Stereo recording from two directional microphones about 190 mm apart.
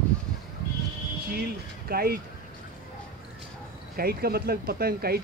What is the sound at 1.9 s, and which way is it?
Speech, 55° right (ahead or behind).